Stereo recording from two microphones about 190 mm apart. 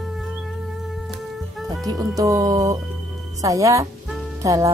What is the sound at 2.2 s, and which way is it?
Speech, 15° right (ahead or behind).